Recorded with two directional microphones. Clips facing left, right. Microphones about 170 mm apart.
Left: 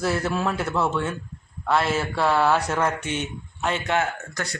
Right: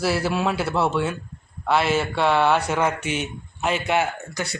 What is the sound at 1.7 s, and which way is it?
A man's voice, centre (ahead or behind).